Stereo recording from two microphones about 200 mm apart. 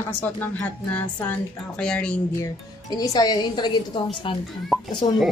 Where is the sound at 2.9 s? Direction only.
20° left (ahead or behind).